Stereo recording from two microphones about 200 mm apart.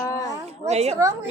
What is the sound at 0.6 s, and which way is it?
Speech, 35° right (ahead or behind).